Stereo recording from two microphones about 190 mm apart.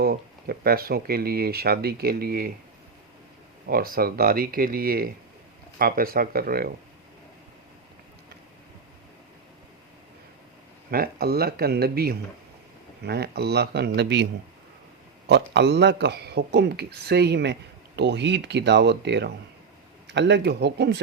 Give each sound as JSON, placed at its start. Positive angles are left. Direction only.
{"t": 0.0, "sound": "speech", "side_deg": -55}
{"t": 3.7, "sound": "speech", "side_deg": -50}
{"t": 10.9, "sound": "speech", "side_deg": -55}
{"t": 15.3, "sound": "speech", "side_deg": -60}